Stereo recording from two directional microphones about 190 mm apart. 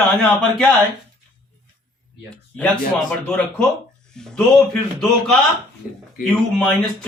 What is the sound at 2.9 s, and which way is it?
Speech, 5° left (ahead or behind).